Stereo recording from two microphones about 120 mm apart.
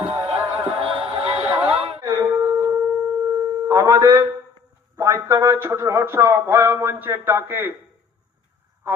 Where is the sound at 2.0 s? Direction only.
25° right (ahead or behind).